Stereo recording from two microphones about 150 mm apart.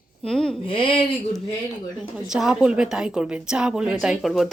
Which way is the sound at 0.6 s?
35° left (ahead or behind).